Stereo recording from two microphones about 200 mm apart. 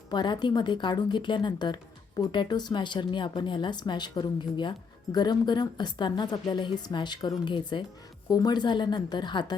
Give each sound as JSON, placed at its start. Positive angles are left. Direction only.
{"t": 0.1, "sound": "speech", "side_deg": 20}